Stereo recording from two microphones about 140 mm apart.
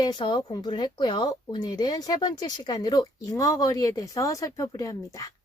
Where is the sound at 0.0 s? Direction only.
35° left (ahead or behind).